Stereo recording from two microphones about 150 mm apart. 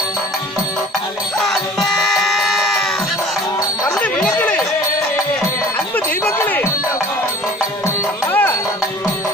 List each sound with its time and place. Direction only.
1.4 s music: centre (ahead or behind)
4.0 s chatter: 10° left (ahead or behind)
6.2 s music: 10° left (ahead or behind)
8.3 s music: 15° left (ahead or behind)